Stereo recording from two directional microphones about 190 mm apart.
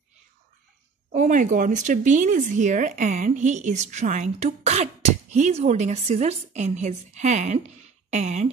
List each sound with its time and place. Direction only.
1.1 s speech: 40° right (ahead or behind)